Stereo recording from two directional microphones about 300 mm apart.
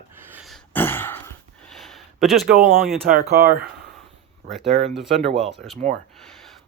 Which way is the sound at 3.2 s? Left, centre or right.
Right.